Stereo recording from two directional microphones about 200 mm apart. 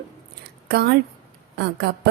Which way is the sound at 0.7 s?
55° right (ahead or behind).